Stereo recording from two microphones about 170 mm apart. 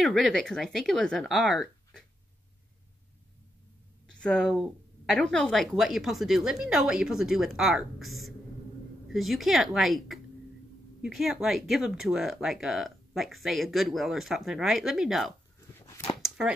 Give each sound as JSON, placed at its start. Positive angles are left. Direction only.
{"t": 0.0, "sound": "speech", "side_deg": 0}
{"t": 4.2, "sound": "speech", "side_deg": 5}